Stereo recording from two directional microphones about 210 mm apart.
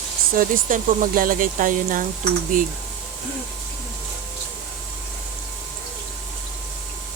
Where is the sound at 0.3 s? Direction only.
40° right (ahead or behind).